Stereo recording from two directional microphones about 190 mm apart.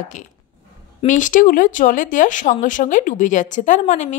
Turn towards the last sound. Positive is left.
turn(degrees=40)  # may be behind; listen again after turning